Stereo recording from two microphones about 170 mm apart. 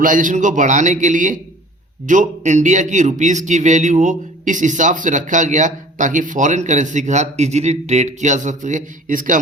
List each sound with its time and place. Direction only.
0.0 s speech: 50° right (ahead or behind)